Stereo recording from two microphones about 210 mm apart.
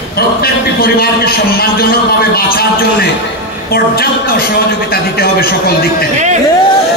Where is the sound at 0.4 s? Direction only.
45° left (ahead or behind).